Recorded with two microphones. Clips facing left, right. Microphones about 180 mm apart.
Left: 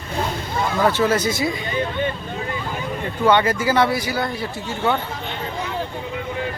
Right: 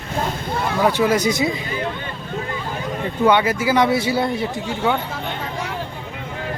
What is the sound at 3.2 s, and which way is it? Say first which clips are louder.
Speech: even; 10° right (ahead or behind).